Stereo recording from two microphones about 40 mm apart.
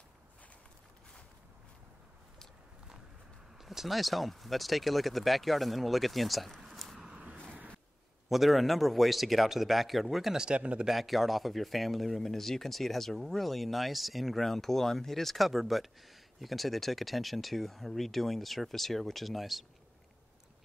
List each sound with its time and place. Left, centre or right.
3.6 s speech: centre
8.3 s speech: centre
10.3 s speech: right
10.6 s speech: right
10.9 s speech: centre